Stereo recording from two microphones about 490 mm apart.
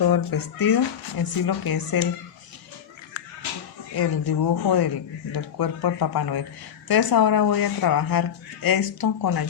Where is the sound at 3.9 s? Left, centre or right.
Left.